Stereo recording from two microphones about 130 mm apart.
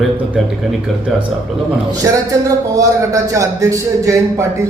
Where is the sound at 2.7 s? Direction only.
25° right (ahead or behind).